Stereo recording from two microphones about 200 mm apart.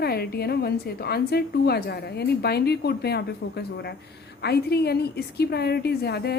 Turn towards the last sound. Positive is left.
turn(degrees=55)  # may be behind; listen again after turning